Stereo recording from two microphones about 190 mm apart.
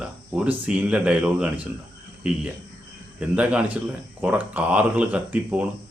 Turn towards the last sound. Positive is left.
turn(degrees=-10)  # may be behind; listen again after turning